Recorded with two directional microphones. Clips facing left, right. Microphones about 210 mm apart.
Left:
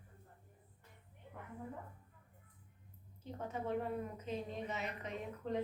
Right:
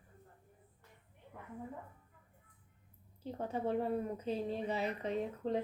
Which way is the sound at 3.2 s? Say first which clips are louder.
Right 5 dB; 30° right (ahead or behind).